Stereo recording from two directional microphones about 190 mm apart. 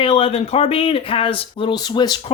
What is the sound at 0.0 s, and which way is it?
Speech, 30° left (ahead or behind).